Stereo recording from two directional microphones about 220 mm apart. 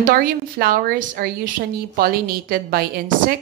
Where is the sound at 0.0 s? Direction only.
40° right (ahead or behind).